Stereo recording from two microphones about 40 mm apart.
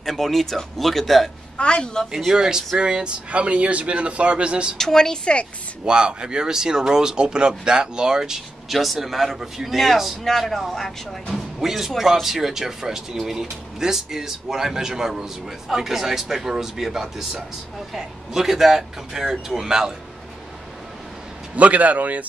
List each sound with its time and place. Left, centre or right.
0.0 s speech: centre
1.6 s a woman's voice: left
2.1 s speech: centre
4.7 s speech: centre
5.9 s speech: right
8.6 s speech: centre
11.6 s speech: centre
21.5 s a man's voice: right